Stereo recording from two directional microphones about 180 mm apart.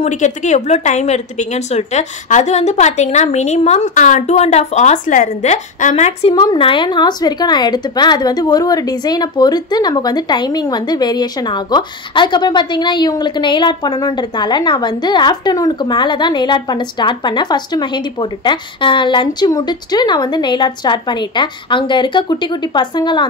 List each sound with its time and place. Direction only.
0.0 s a woman's voice: 40° left (ahead or behind)
6.3 s speech: 25° left (ahead or behind)